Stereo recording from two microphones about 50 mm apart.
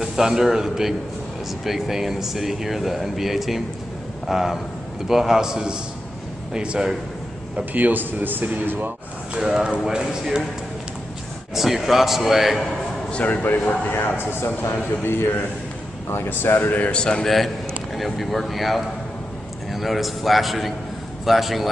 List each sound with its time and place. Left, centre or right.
0.0 s a man's voice: centre
7.7 s a man's voice: right
9.8 s a man's voice: centre
11.5 s speech: centre
13.1 s speech: left
14.0 s a man's voice: left
16.8 s speech: centre
17.9 s speech: centre